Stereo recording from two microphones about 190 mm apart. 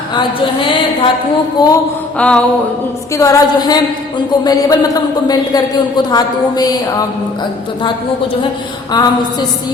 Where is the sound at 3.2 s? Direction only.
15° left (ahead or behind).